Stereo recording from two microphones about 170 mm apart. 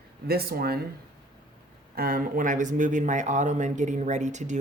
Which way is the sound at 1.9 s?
60° right (ahead or behind).